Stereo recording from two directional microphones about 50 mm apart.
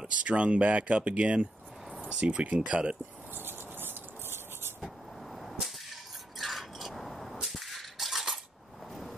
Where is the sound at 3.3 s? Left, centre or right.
Right.